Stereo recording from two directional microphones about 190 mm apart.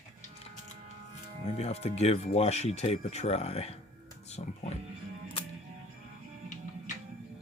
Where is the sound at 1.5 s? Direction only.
35° left (ahead or behind).